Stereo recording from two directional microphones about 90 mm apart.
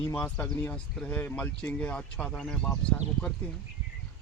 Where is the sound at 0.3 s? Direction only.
15° left (ahead or behind).